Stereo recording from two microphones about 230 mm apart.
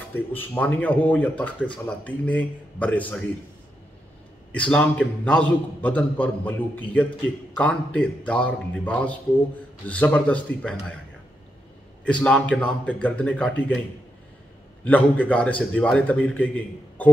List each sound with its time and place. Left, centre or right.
0.1 s speech: centre
4.5 s a man's voice: centre
12.0 s a man's voice: centre
14.9 s speech: centre